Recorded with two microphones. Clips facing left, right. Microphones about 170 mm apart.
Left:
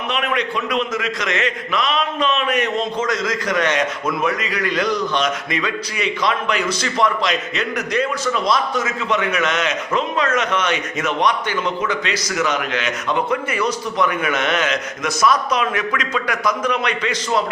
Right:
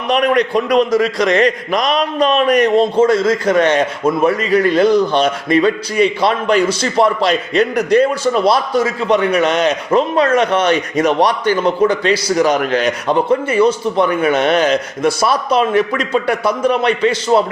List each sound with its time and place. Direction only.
0.1 s a man's voice: 40° right (ahead or behind)